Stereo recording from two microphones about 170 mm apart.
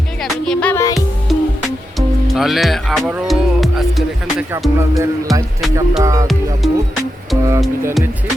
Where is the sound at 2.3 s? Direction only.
Centre (ahead or behind).